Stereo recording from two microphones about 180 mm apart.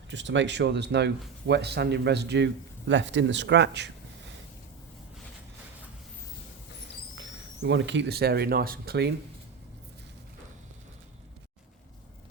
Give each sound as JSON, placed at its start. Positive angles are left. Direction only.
{"t": 0.1, "sound": "a man's voice", "side_deg": -85}
{"t": 7.2, "sound": "speech", "side_deg": -85}